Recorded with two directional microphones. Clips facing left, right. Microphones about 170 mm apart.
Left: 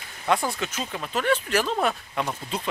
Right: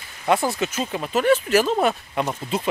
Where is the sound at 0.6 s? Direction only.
10° right (ahead or behind).